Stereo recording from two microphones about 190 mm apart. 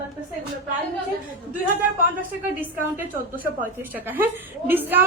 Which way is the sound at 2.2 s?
10° right (ahead or behind).